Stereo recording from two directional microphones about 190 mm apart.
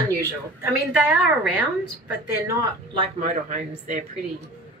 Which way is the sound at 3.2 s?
40° right (ahead or behind).